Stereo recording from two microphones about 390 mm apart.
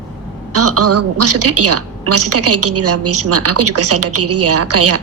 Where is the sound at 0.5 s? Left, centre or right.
Right.